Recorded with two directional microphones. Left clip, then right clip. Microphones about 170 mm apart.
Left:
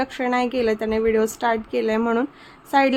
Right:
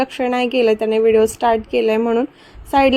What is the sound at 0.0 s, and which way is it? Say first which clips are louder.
A woman's voice: right 4 dB; 15° right (ahead or behind).